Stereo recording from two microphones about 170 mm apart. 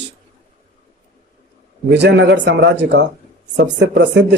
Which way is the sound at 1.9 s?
90° right.